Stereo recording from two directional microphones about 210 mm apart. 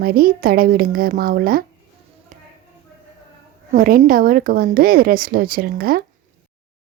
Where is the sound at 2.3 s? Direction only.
35° right (ahead or behind).